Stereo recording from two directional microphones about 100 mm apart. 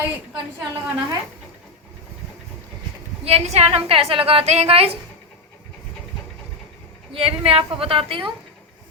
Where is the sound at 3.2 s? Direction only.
90° right.